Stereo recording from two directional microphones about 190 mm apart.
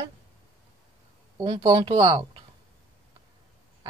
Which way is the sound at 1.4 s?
20° right (ahead or behind).